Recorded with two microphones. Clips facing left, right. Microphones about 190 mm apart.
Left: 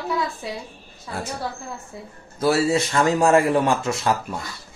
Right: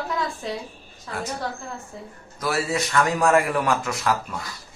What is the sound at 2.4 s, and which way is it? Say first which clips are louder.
Speech: left 6 dB; 30° left (ahead or behind).